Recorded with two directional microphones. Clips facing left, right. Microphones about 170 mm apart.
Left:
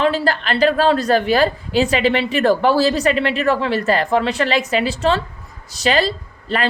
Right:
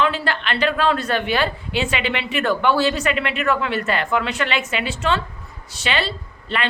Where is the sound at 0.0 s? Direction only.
40° left (ahead or behind).